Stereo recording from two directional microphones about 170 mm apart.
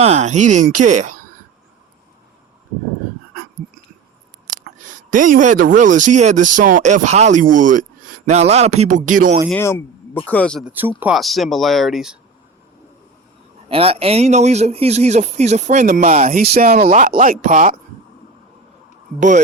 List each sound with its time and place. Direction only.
0.0 s speech: 40° right (ahead or behind)
4.4 s a man's voice: 50° right (ahead or behind)
9.5 s a man's voice: 10° left (ahead or behind)
10.7 s speech: 10° right (ahead or behind)
13.7 s a man's voice: 35° right (ahead or behind)
16.4 s speech: 65° right (ahead or behind)